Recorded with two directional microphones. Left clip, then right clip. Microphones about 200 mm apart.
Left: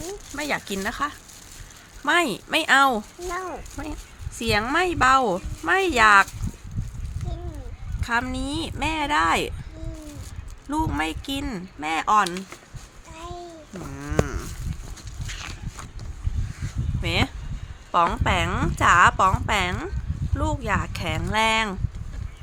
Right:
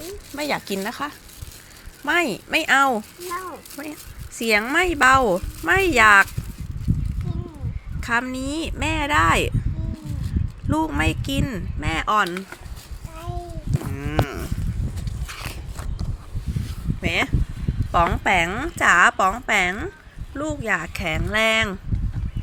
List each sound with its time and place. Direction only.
0.3 s speech: 10° right (ahead or behind)
3.3 s speech: 45° left (ahead or behind)
4.4 s speech: 10° right (ahead or behind)
8.0 s speech: 10° right (ahead or behind)
10.7 s speech: 10° right (ahead or behind)
13.9 s cattle: 10° right (ahead or behind)
17.0 s speech: 15° right (ahead or behind)